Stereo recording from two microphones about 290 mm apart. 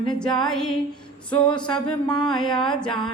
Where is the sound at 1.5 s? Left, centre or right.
Centre.